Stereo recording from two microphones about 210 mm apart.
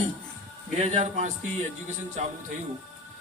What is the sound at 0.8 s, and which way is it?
Speech, 35° right (ahead or behind).